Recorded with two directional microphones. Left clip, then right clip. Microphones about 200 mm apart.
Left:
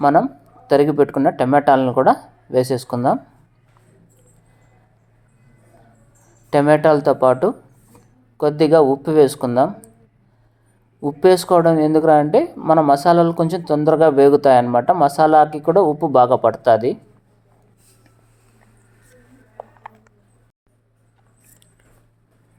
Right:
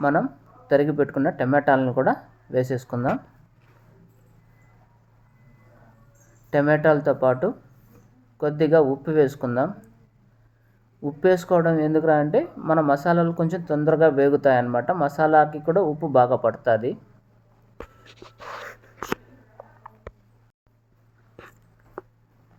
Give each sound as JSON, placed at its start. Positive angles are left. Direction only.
{"t": 0.0, "sound": "speech", "side_deg": 15}
{"t": 6.5, "sound": "speech", "side_deg": 15}
{"t": 11.0, "sound": "speech", "side_deg": 15}